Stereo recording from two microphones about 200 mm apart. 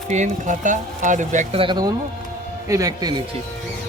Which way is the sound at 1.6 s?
20° right (ahead or behind).